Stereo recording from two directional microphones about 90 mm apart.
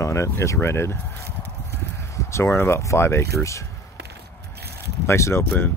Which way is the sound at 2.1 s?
30° left (ahead or behind).